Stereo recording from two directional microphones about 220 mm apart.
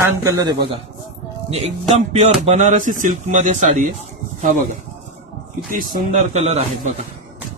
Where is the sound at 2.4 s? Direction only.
30° right (ahead or behind).